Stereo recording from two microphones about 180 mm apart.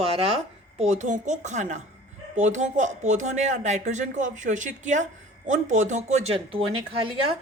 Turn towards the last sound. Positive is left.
turn(degrees=-30)  # may be behind; listen again after turning